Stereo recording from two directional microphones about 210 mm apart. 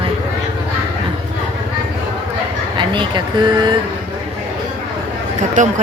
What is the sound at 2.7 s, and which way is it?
Speech, 20° right (ahead or behind).